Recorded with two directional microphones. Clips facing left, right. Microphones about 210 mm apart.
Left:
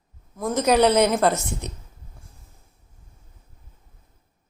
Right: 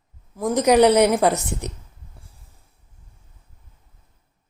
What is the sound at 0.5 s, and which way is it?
A woman's voice, 15° right (ahead or behind).